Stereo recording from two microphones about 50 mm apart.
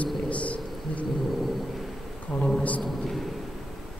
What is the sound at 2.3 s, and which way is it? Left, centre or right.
Speech, left.